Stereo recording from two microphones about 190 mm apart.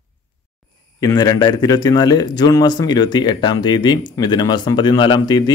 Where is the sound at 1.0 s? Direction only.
20° left (ahead or behind).